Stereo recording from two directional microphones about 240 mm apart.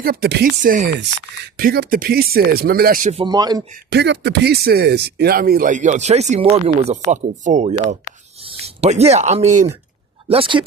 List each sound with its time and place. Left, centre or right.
0.0 s speech: right; by 3.6 s centre
3.8 s speech: right